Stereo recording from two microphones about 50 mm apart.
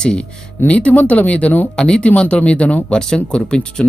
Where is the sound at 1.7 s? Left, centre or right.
Centre.